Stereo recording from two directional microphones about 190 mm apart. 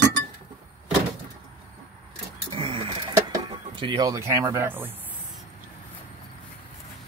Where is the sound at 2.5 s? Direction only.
30° right (ahead or behind); by 4.9 s 10° right (ahead or behind).